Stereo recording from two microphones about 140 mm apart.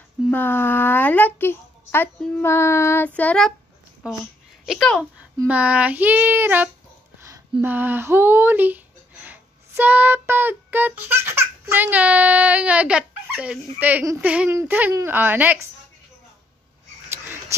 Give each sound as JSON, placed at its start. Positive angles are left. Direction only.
{"t": 0.3, "sound": "a child's voice", "side_deg": 15}
{"t": 4.0, "sound": "child singing", "side_deg": -5}
{"t": 4.6, "sound": "a woman's voice", "side_deg": 5}
{"t": 5.5, "sound": "child singing", "side_deg": -10}
{"t": 7.2, "sound": "a sound", "side_deg": -25}
{"t": 7.6, "sound": "speech", "side_deg": -15}
{"t": 14.2, "sound": "child singing", "side_deg": -10}